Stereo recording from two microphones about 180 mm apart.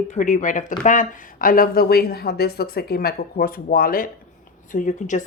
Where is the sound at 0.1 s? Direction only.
45° left (ahead or behind).